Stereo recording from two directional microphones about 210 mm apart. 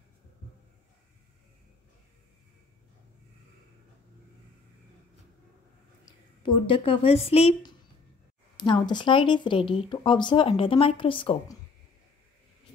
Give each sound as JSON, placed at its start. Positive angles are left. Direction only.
{"t": 6.0, "sound": "a woman's voice", "side_deg": 20}